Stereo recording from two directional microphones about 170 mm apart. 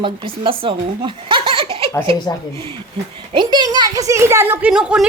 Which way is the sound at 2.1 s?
25° left (ahead or behind).